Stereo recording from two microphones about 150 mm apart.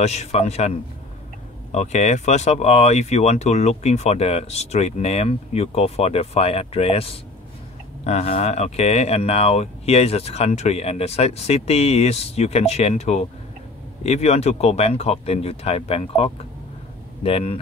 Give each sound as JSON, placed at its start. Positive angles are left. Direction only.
{"t": 0.0, "sound": "speech", "side_deg": 45}